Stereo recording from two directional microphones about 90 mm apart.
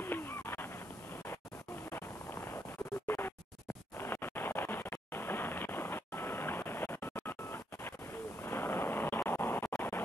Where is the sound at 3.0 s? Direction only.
25° left (ahead or behind).